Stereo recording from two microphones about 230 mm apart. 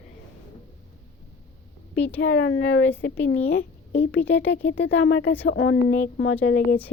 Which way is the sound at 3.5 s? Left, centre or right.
Left.